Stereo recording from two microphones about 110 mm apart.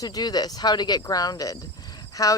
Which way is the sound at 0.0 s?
35° left (ahead or behind).